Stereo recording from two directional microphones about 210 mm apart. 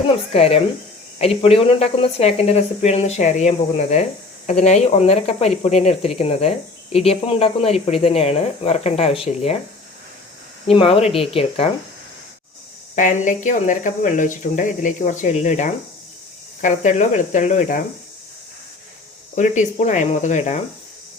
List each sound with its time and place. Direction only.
0.3 s speech: 30° left (ahead or behind)
10.7 s speech: 25° left (ahead or behind)
13.0 s speech: 35° left (ahead or behind)
19.4 s speech: 35° left (ahead or behind)